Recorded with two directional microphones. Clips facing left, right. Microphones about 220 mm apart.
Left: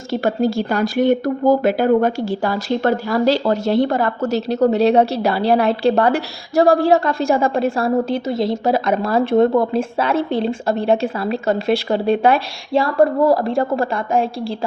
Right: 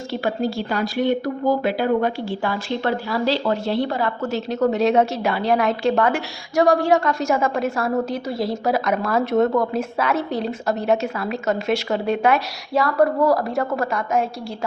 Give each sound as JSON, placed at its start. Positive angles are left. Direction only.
{"t": 0.1, "sound": "speech", "side_deg": 45}